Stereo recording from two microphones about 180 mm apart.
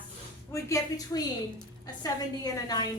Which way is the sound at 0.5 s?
20° left (ahead or behind).